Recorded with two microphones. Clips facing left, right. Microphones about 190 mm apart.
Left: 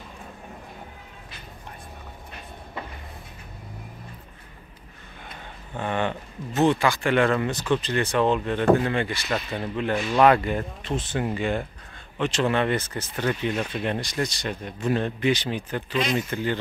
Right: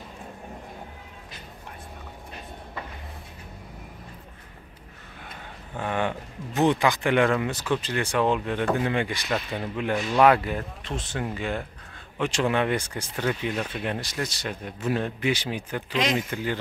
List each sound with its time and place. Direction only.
5.8 s speech: 5° right (ahead or behind)
9.3 s speech: 5° right (ahead or behind)
12.2 s speech: 10° right (ahead or behind)
15.9 s speech: 90° right
16.2 s speech: 10° right (ahead or behind)